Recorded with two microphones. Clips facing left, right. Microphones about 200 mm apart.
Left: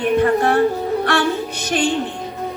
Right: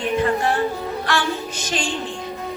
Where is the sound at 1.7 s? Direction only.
60° left (ahead or behind).